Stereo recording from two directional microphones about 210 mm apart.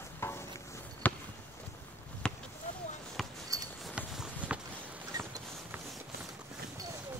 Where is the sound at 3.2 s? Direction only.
Centre (ahead or behind).